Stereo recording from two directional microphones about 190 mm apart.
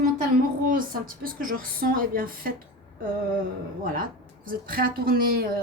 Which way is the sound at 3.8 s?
50° right (ahead or behind).